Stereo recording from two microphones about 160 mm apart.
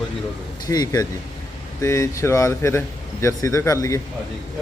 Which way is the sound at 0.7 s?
25° left (ahead or behind).